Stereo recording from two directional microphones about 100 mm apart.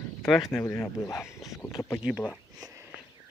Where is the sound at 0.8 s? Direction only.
30° left (ahead or behind).